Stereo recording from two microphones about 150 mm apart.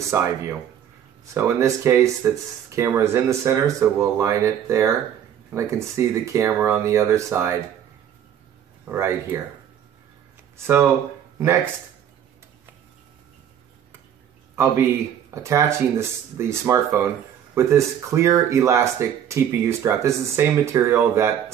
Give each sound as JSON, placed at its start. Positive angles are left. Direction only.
{"t": 0.1, "sound": "speech", "side_deg": -20}
{"t": 8.8, "sound": "speech", "side_deg": -15}
{"t": 14.5, "sound": "a man's voice", "side_deg": -15}